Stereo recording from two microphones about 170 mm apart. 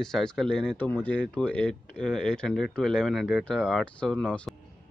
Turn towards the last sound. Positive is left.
turn(degrees=5)  # may be behind; listen again after turning